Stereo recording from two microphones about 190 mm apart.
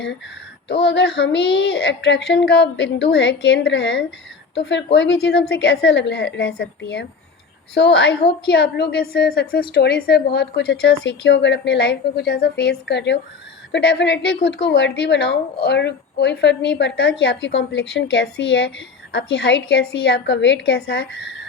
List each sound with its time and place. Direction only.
0.7 s a woman's voice: 65° left (ahead or behind)